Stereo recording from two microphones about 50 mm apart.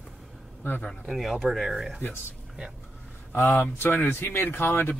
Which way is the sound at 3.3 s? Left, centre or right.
Left.